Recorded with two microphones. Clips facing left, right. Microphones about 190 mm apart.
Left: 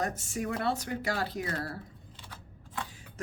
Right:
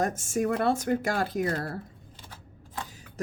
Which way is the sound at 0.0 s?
45° right (ahead or behind).